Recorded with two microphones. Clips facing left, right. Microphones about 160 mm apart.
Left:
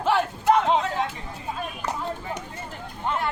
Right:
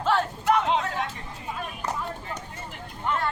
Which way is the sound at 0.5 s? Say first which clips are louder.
Left 3 dB; 30° left (ahead or behind).